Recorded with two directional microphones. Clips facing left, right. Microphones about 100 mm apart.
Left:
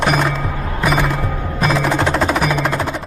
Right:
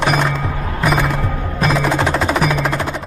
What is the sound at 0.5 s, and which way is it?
Music, 15° right (ahead or behind).